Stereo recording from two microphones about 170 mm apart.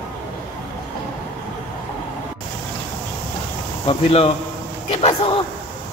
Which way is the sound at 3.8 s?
30° left (ahead or behind).